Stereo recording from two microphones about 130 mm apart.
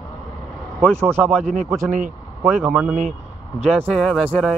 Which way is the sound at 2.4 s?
5° right (ahead or behind).